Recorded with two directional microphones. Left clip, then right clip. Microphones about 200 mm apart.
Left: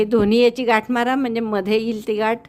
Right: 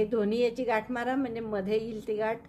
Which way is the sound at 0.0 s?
45° left (ahead or behind).